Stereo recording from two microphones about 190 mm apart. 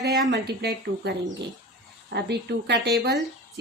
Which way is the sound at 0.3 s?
60° right (ahead or behind).